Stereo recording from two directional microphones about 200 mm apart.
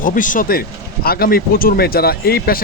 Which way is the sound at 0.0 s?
40° left (ahead or behind).